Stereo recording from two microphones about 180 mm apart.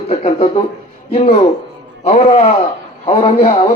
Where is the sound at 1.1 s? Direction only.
35° left (ahead or behind).